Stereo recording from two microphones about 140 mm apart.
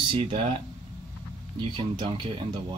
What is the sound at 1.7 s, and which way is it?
Speech, 35° right (ahead or behind).